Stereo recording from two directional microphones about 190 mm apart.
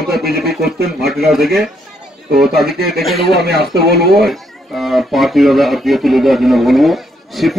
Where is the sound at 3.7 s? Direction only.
55° right (ahead or behind).